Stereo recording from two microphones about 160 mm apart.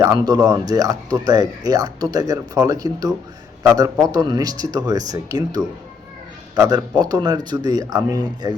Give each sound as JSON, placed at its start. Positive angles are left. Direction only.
{"t": 0.0, "sound": "speech", "side_deg": -25}